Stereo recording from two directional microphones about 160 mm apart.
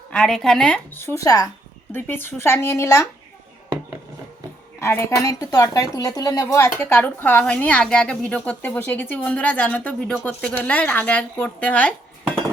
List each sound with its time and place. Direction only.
0.1 s speech: 5° left (ahead or behind)
1.0 s a woman's voice: 20° left (ahead or behind)
4.8 s a woman's voice: 15° left (ahead or behind)